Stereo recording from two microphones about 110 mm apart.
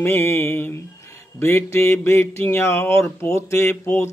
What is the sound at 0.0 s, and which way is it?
Mantra, 20° left (ahead or behind).